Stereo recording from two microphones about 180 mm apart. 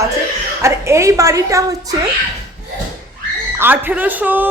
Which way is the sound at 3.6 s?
10° right (ahead or behind).